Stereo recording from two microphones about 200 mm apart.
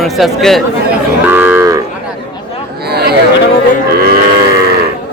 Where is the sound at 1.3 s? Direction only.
10° right (ahead or behind).